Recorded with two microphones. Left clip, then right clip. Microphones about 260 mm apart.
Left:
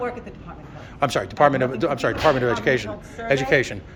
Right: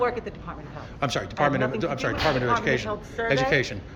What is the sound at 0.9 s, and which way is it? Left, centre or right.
A man's voice, centre.